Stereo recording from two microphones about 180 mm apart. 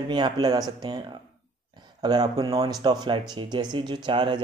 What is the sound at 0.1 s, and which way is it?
Speech, 25° right (ahead or behind).